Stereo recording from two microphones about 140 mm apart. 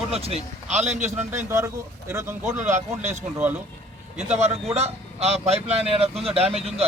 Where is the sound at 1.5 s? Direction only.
20° right (ahead or behind).